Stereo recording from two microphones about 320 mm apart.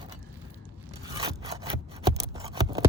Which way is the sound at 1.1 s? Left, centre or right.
Centre.